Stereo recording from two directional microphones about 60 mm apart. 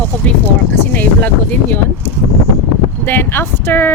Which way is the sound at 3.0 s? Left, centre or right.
Left.